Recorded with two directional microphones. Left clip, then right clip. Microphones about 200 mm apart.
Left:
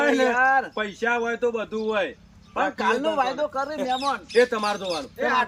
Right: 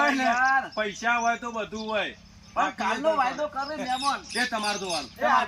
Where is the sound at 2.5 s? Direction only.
35° left (ahead or behind).